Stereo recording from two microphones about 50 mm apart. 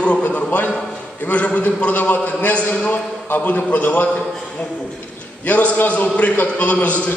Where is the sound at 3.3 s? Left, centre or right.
Left.